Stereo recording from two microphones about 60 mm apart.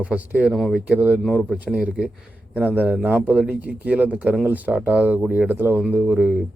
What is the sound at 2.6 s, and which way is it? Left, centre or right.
Speech, right.